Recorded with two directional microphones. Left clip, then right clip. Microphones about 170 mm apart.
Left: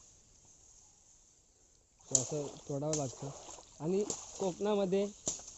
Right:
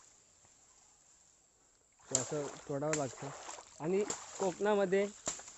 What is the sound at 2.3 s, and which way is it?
Speech, 35° right (ahead or behind).